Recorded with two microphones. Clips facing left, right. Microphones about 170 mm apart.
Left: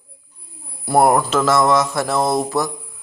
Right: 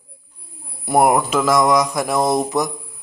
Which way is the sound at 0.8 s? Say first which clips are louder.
Left 1 dB; 15° right (ahead or behind).